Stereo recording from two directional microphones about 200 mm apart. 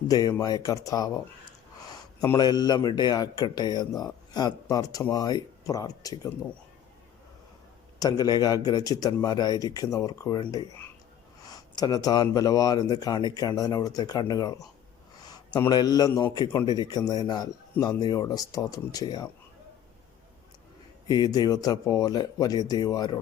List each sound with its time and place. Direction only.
0.1 s speech: 20° left (ahead or behind)
2.2 s speech: 20° left (ahead or behind)
7.9 s speech: 20° left (ahead or behind)
15.7 s speech: 20° left (ahead or behind)
21.1 s speech: 20° left (ahead or behind)